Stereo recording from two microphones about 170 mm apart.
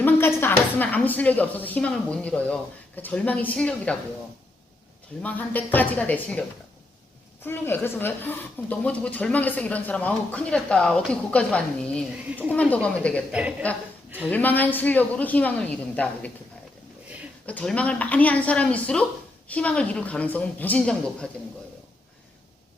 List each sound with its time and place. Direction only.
0.0 s speech: 15° left (ahead or behind)
5.2 s speech: 10° left (ahead or behind)
7.4 s speech: 10° left (ahead or behind)
17.4 s speech: 5° left (ahead or behind)